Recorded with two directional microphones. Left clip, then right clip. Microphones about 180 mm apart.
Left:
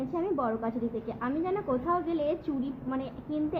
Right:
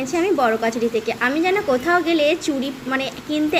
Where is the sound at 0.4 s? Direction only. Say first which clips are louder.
Right 13 dB; 15° right (ahead or behind).